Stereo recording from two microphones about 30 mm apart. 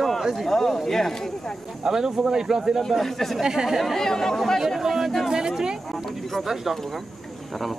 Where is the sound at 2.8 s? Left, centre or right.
Centre.